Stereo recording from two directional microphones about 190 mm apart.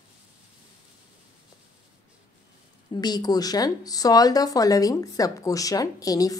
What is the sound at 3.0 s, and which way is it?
A woman's voice, 20° left (ahead or behind).